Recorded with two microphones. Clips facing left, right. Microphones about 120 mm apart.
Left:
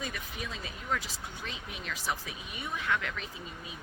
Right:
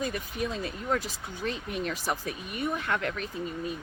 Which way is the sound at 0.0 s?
45° right (ahead or behind).